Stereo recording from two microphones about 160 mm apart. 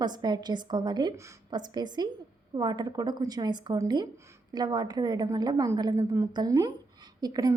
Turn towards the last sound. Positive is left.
turn(degrees=-25)  # may be behind; listen again after turning